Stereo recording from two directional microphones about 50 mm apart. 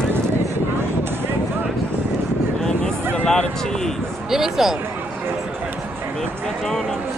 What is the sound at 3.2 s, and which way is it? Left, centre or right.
Speech, centre.